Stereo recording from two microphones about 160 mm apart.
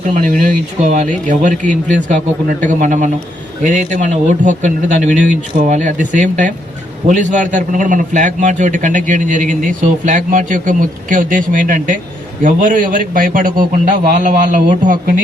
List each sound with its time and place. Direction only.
0.0 s a man's voice: 55° right (ahead or behind)